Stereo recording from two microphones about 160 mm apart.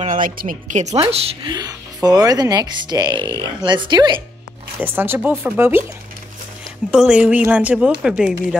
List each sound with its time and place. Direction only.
0.0 s a woman's voice: 55° right (ahead or behind); by 1.5 s 40° right (ahead or behind)
1.5 s speech: 25° right (ahead or behind)
4.7 s speech: 10° right (ahead or behind)
6.9 s speech: 5° right (ahead or behind)